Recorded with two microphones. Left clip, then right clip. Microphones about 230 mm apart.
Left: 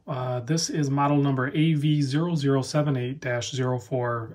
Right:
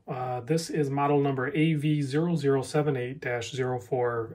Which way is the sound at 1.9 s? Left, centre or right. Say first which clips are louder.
Left 1 dB; left.